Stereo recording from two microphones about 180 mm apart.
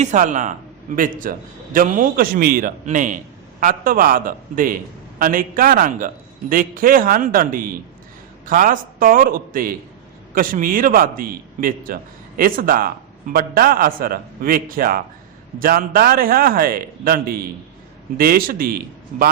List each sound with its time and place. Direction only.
0.0 s a man's voice: 45° right (ahead or behind)